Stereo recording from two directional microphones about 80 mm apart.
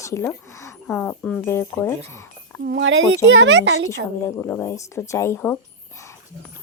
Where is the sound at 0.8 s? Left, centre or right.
Centre.